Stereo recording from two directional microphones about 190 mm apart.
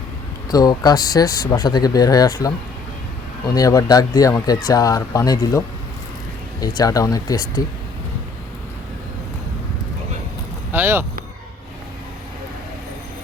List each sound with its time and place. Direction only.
0.5 s speech: 20° left (ahead or behind)
10.7 s vehicle: 10° right (ahead or behind)